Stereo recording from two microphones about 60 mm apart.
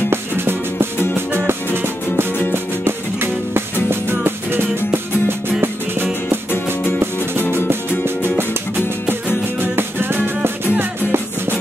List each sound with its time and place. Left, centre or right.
0.1 s music: right
3.9 s music: right
6.5 s music: left
8.0 s music: right
9.6 s music: right